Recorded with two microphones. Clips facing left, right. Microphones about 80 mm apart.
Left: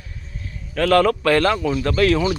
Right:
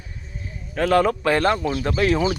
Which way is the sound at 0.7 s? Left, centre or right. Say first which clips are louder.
Left 2 dB; centre.